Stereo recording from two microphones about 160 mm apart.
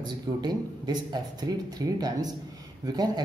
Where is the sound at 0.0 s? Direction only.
25° right (ahead or behind).